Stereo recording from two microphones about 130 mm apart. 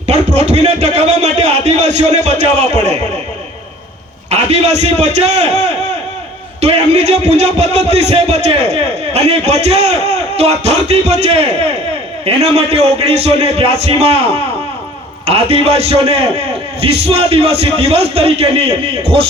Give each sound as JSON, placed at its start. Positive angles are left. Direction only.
{"t": 0.1, "sound": "a man's voice", "side_deg": -60}
{"t": 4.3, "sound": "a man's voice", "side_deg": -60}